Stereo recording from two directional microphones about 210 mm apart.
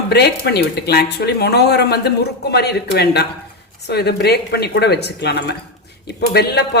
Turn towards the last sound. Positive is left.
turn(degrees=50)  # may be behind; listen again after turning